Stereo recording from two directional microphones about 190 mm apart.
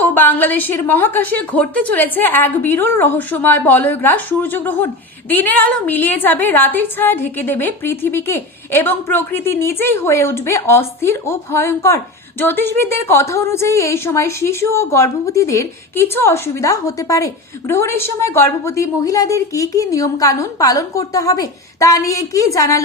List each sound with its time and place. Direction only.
0.0 s a woman's voice: 10° left (ahead or behind)